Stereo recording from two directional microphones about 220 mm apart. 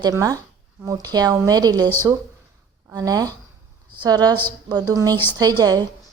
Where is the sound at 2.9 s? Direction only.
15° right (ahead or behind).